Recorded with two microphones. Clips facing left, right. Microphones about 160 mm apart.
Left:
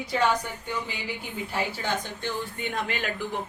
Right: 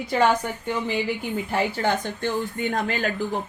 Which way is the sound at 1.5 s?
55° right (ahead or behind).